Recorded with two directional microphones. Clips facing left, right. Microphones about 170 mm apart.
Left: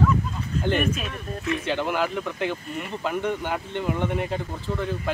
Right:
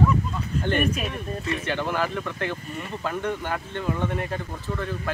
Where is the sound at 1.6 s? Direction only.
15° left (ahead or behind).